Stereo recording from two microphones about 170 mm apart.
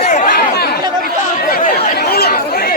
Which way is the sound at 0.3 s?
70° left (ahead or behind).